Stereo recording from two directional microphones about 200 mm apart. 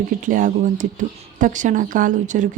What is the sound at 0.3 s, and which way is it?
A woman's voice, 40° right (ahead or behind).